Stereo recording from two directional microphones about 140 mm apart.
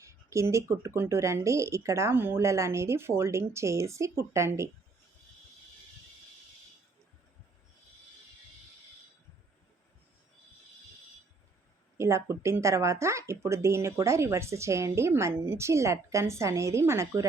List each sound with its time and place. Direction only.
0.0 s speech: 20° right (ahead or behind)
11.9 s speech: 20° right (ahead or behind)